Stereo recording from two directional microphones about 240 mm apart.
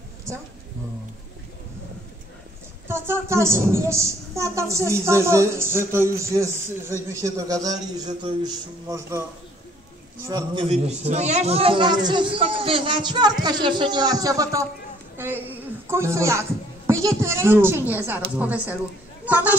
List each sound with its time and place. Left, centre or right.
2.9 s a woman's voice: centre
10.2 s a man's voice: centre